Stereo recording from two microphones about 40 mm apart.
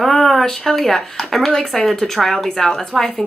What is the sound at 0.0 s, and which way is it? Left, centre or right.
Speech, centre.